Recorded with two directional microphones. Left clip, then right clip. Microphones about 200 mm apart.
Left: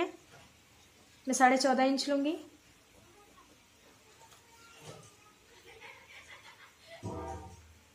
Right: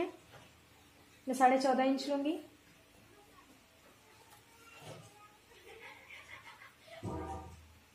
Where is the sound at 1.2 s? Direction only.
25° left (ahead or behind).